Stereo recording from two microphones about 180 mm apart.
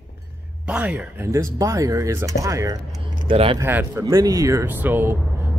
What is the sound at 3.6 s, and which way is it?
Speech, 15° right (ahead or behind).